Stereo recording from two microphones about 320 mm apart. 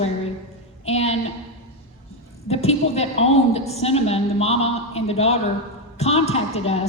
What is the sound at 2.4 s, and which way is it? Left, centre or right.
A woman's voice, centre.